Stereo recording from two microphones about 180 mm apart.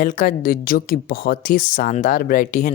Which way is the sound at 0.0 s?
45° left (ahead or behind).